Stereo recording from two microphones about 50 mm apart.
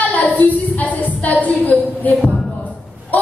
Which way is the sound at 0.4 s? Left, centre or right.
Left.